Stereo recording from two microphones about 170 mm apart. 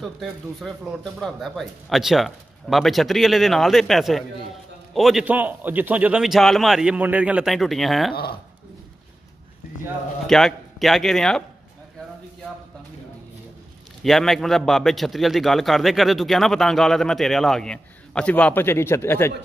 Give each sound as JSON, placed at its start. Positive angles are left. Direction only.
{"t": 0.0, "sound": "a man's voice", "side_deg": 0}
{"t": 8.1, "sound": "speech", "side_deg": 65}
{"t": 10.2, "sound": "a man's voice", "side_deg": 0}
{"t": 14.0, "sound": "a man's voice", "side_deg": 0}